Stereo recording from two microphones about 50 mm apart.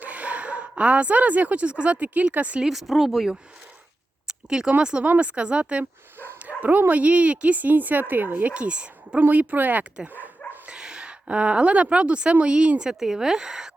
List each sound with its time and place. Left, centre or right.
0.0 s a woman's voice: right
2.6 s speech: centre
4.3 s a sound: centre
4.8 s a woman's voice: centre
5.0 s a woman's voice: right
6.6 s speech: right
8.5 s a woman's voice: right
10.7 s a woman's voice: centre
12.9 s speech: centre